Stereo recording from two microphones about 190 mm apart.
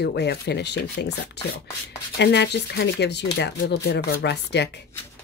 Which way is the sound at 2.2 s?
65° left (ahead or behind).